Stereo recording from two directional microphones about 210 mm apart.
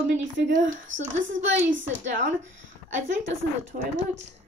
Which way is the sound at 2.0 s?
35° right (ahead or behind).